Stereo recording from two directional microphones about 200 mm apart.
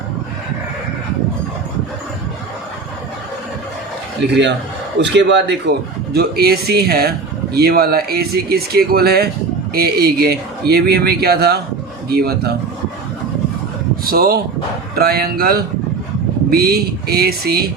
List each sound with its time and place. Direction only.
4.9 s a man's voice: 60° right (ahead or behind)
14.0 s speech: 50° right (ahead or behind)